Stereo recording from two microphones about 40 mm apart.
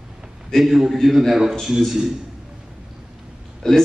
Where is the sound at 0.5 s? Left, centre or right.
Centre.